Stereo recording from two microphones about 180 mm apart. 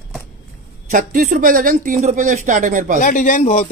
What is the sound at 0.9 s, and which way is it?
Speech, 50° right (ahead or behind).